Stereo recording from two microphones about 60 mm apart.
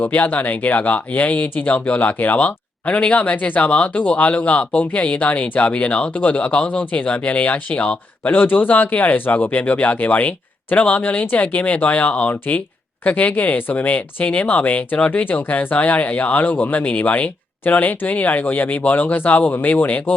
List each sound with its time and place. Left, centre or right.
0.0 s speech: left